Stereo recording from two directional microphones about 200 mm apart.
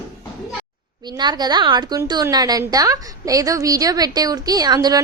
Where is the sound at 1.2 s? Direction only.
20° right (ahead or behind).